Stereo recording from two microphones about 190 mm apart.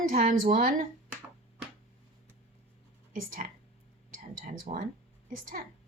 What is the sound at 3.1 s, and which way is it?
Speech, 45° right (ahead or behind).